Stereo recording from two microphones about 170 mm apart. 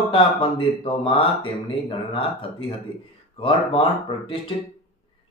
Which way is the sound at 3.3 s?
30° left (ahead or behind).